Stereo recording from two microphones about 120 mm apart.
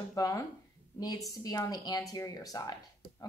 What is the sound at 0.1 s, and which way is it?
A woman's voice, 25° left (ahead or behind).